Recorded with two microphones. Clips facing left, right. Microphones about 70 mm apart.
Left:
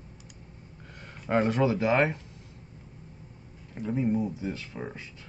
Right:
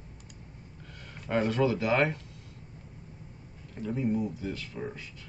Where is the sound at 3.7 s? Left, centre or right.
Centre.